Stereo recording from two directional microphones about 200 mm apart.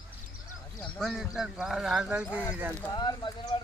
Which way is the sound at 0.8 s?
Centre (ahead or behind).